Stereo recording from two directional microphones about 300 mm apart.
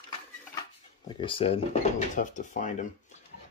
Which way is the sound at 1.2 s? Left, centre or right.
Centre.